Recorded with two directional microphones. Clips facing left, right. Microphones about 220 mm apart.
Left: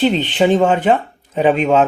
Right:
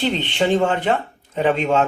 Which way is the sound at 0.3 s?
15° left (ahead or behind).